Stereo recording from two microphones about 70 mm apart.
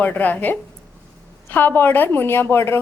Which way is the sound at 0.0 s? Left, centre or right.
Left.